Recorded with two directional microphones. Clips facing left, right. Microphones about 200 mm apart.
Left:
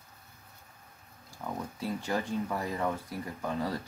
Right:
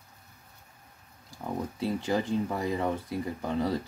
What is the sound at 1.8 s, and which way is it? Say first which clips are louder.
Speech: right 4 dB; 25° right (ahead or behind).